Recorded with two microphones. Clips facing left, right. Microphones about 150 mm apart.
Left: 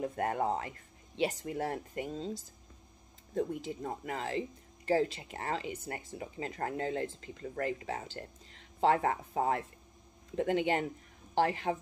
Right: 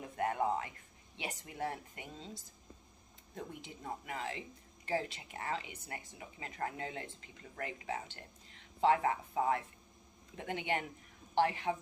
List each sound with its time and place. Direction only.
0.0 s speech: 40° left (ahead or behind)
3.3 s speech: 40° left (ahead or behind)